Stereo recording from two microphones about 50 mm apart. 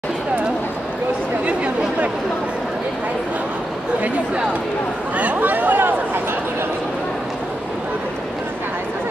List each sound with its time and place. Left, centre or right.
1.4 s chatter: right
5.1 s chatter: right